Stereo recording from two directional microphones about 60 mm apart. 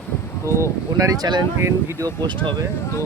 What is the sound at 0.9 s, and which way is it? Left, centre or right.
Speech, right.